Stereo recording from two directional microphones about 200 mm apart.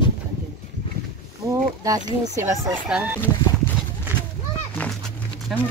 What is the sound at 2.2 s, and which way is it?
Speech, 15° right (ahead or behind).